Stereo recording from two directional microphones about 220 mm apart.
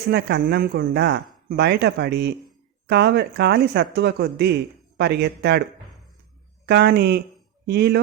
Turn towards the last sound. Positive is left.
turn(degrees=-45)  # may be behind; listen again after turning